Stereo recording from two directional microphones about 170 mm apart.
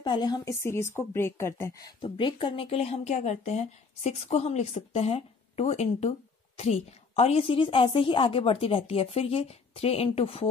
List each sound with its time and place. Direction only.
0.0 s a woman's voice: 25° left (ahead or behind)